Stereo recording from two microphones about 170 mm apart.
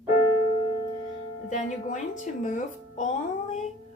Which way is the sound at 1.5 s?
45° left (ahead or behind).